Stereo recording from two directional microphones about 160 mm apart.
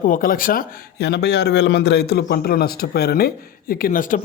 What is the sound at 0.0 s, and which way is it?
Speech, 60° left (ahead or behind).